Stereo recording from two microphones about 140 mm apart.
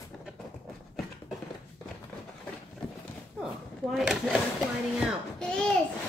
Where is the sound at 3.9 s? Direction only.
Centre (ahead or behind).